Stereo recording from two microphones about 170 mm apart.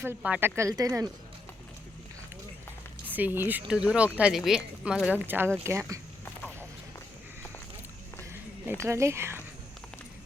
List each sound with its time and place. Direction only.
0.0 s speech: 10° right (ahead or behind)
3.1 s speech: 10° right (ahead or behind)
8.2 s a sound: 15° right (ahead or behind)
8.8 s speech: 15° right (ahead or behind)